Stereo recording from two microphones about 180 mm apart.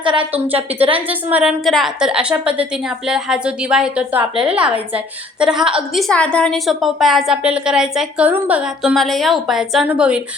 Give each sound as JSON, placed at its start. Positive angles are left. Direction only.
{"t": 0.0, "sound": "a woman's voice", "side_deg": -30}
{"t": 0.3, "sound": "a woman's voice", "side_deg": -10}